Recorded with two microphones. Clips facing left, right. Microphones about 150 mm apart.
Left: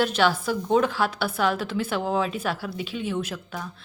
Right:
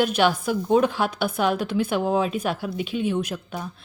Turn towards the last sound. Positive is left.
turn(degrees=-15)  # may be behind; listen again after turning